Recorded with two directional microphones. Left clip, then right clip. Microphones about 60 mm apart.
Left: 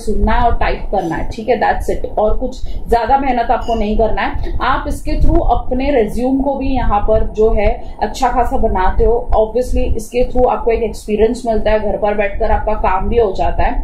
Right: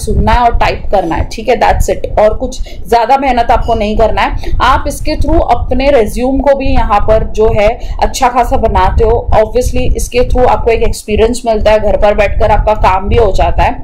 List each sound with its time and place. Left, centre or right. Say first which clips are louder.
0.2 s a woman's voice: right 7 dB; right